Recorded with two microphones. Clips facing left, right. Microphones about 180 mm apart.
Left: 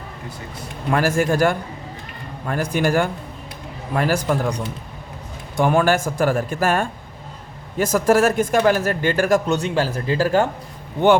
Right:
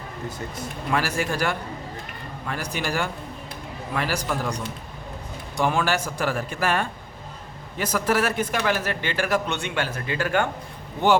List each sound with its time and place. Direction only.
0.9 s speech: 50° left (ahead or behind)
5.5 s speech: 50° left (ahead or behind); by 10.5 s 35° left (ahead or behind)